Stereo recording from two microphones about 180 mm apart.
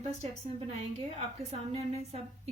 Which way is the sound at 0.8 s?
35° right (ahead or behind).